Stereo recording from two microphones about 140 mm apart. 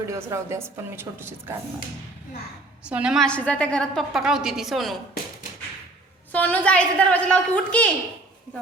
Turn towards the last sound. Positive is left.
turn(degrees=10)  # may be behind; listen again after turning